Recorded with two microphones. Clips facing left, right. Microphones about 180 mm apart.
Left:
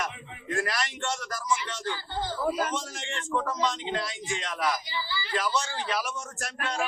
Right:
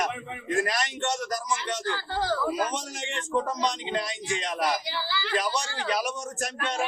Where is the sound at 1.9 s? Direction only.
90° right.